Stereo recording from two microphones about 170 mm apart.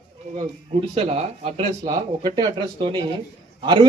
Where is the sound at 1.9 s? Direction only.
25° right (ahead or behind).